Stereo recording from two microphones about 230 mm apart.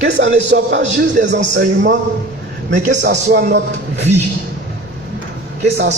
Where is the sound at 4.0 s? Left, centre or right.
Right.